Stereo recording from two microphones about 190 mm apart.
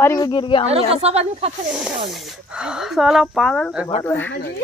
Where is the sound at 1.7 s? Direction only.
5° right (ahead or behind).